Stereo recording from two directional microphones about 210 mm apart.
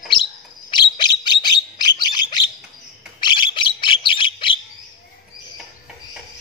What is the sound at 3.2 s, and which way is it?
Bird, 20° left (ahead or behind).